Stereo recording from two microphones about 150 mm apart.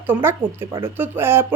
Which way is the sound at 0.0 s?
15° right (ahead or behind).